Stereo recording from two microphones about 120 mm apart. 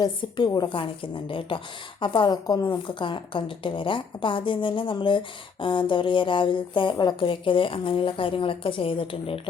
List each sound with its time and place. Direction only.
0.0 s a woman's voice: 40° left (ahead or behind)